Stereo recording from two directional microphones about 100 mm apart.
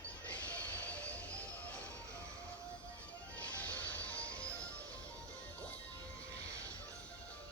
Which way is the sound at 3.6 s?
15° left (ahead or behind).